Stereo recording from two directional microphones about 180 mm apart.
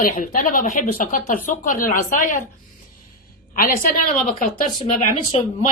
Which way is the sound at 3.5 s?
50° left (ahead or behind).